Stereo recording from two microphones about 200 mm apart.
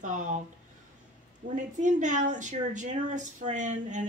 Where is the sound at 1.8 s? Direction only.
40° right (ahead or behind).